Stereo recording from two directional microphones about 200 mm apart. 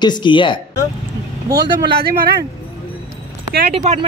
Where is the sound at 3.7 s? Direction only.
30° right (ahead or behind).